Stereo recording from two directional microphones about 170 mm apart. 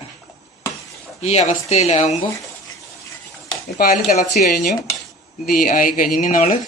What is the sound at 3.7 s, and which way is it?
Speech, 60° left (ahead or behind).